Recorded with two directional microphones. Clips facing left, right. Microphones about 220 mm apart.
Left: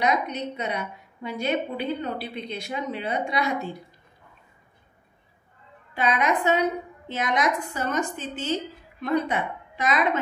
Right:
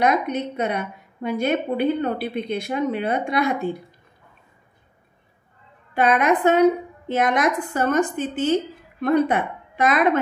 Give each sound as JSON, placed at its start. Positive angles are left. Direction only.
{"t": 0.0, "sound": "a woman's voice", "side_deg": -50}
{"t": 5.9, "sound": "a woman's voice", "side_deg": -55}